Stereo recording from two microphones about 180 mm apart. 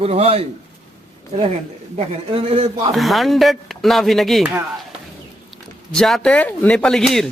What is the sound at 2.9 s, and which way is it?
Speech, centre (ahead or behind).